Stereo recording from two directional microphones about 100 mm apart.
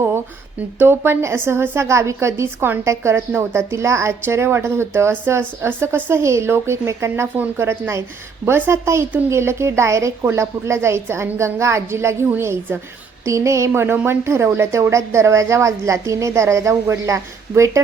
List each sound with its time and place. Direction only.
0.8 s a woman's voice: 25° right (ahead or behind)